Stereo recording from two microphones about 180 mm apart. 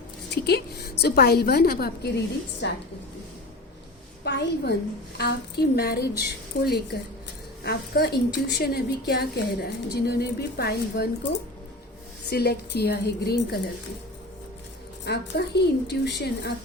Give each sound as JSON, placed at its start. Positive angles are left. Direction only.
{"t": 0.4, "sound": "a woman's voice", "side_deg": 65}
{"t": 4.2, "sound": "a woman's voice", "side_deg": 70}
{"t": 7.6, "sound": "a woman's voice", "side_deg": 65}
{"t": 12.3, "sound": "a woman's voice", "side_deg": 60}
{"t": 15.0, "sound": "a woman's voice", "side_deg": 65}